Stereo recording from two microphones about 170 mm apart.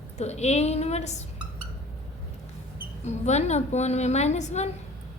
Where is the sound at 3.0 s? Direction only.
40° left (ahead or behind).